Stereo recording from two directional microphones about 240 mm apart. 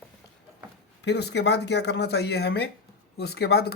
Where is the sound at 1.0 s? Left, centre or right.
Left.